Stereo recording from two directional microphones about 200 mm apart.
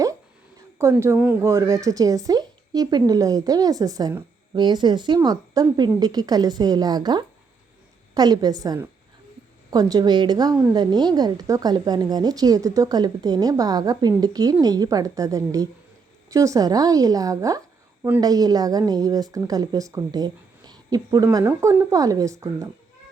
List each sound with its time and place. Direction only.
0.8 s a woman's voice: 15° right (ahead or behind)